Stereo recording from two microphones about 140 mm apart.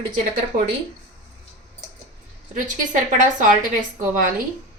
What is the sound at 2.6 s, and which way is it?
A woman's voice, 70° right (ahead or behind).